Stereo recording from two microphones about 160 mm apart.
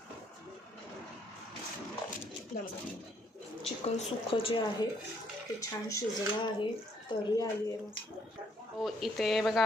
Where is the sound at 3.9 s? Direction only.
35° left (ahead or behind).